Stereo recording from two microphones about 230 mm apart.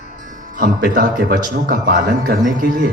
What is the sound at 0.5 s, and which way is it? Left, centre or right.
Speech, right.